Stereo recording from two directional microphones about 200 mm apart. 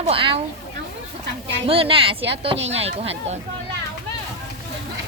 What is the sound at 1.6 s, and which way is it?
Speech, 30° right (ahead or behind).